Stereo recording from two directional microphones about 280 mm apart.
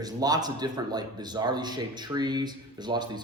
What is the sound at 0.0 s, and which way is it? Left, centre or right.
Speech, centre.